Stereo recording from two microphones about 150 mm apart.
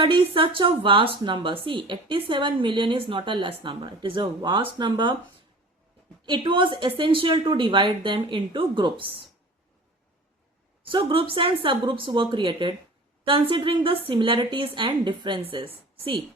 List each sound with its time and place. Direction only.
0.0 s speech: 35° right (ahead or behind)
6.2 s speech: 30° right (ahead or behind)
10.8 s speech: 35° right (ahead or behind)